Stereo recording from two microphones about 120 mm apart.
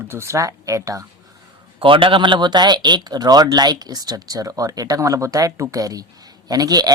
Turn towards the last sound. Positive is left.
turn(degrees=-35)  # may be behind; listen again after turning